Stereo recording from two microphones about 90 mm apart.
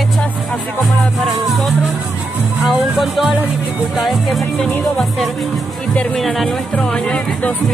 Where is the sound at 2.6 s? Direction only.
5° right (ahead or behind).